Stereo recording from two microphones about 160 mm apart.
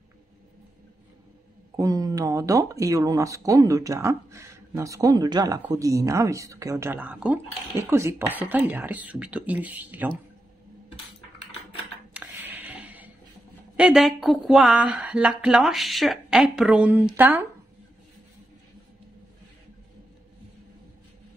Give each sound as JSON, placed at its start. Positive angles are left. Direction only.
{"t": 1.8, "sound": "a woman's voice", "side_deg": -20}
{"t": 12.1, "sound": "a sound", "side_deg": -10}
{"t": 13.7, "sound": "a woman's voice", "side_deg": -5}